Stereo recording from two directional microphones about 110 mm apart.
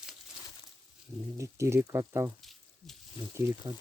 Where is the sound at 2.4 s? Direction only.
Centre (ahead or behind).